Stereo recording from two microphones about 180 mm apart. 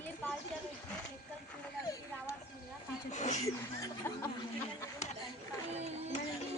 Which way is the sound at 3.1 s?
40° left (ahead or behind).